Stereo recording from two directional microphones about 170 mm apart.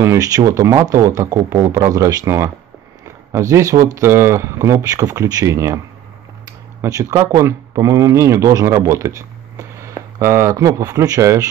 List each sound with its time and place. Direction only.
0.0 s speech: 20° right (ahead or behind)
6.8 s speech: 20° right (ahead or behind)